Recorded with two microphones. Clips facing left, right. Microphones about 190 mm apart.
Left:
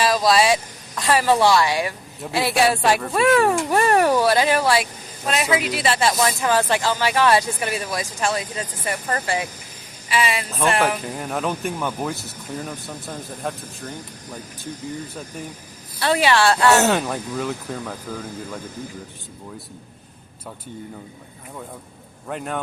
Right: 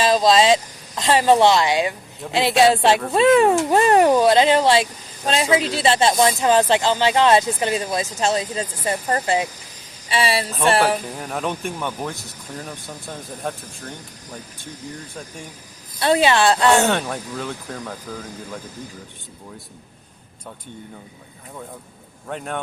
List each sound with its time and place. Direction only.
0.0 s speech: 20° right (ahead or behind)
11.0 s speech: centre (ahead or behind)
16.0 s speech: 25° right (ahead or behind)
16.7 s speech: 5° left (ahead or behind)
22.3 s speech: centre (ahead or behind)